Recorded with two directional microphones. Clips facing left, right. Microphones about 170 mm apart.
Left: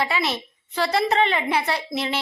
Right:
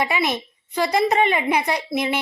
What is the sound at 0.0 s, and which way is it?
A woman's voice, 15° right (ahead or behind).